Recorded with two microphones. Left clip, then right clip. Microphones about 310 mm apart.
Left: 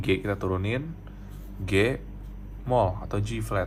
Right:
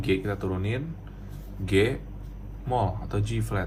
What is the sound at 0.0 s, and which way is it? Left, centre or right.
Speech, left.